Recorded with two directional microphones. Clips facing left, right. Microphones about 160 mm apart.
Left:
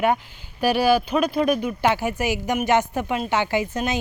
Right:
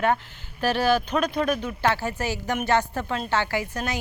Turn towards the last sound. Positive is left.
turn(degrees=20)  # may be behind; listen again after turning